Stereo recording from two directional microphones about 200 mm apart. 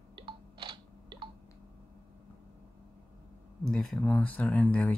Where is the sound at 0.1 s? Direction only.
25° right (ahead or behind).